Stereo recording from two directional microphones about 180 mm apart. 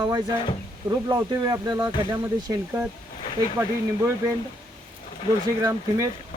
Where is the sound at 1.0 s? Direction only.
20° right (ahead or behind).